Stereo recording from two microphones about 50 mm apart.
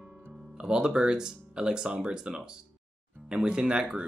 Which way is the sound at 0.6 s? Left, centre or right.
Centre.